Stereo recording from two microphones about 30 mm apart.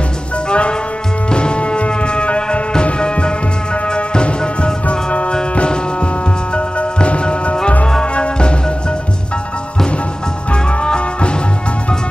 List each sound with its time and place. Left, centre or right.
0.5 s music: left
4.8 s music: left
6.5 s music: left
10.5 s music: left